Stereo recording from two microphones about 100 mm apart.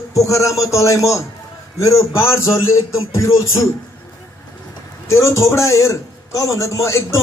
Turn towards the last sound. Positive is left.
turn(degrees=30)  # may be behind; listen again after turning